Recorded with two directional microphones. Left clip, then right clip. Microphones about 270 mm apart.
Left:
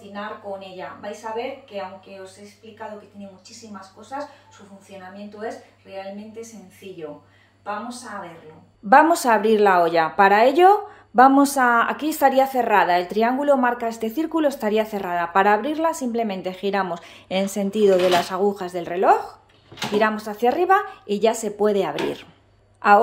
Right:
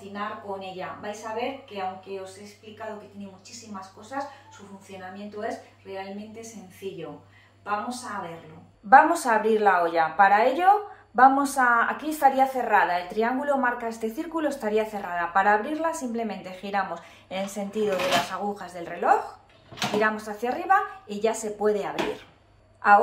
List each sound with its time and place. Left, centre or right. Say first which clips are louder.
0.1 s speech: left 2 dB; centre
8.8 s a woman's voice: left 2 dB; left